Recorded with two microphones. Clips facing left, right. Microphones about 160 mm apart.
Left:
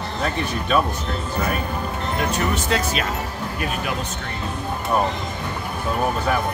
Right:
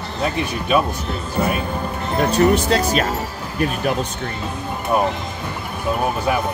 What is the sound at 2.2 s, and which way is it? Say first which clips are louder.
Speech: right 9 dB; 35° right (ahead or behind).